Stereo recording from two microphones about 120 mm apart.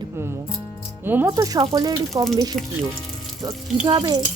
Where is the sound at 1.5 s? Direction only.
30° right (ahead or behind).